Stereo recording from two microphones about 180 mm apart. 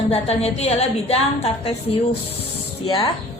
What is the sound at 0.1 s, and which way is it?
A woman's voice, 35° left (ahead or behind).